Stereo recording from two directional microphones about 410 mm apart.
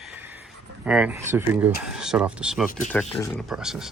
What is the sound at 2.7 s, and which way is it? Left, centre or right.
Speech, centre.